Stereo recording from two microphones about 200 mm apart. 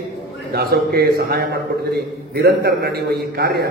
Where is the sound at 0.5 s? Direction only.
50° right (ahead or behind).